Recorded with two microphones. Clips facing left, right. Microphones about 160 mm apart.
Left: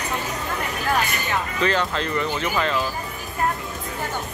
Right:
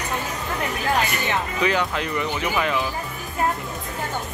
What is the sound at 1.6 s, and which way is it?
Speech, 10° right (ahead or behind).